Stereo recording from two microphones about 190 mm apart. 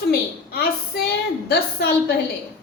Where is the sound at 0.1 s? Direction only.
55° left (ahead or behind).